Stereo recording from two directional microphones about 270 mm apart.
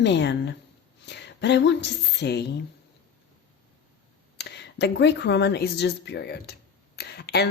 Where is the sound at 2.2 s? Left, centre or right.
Left.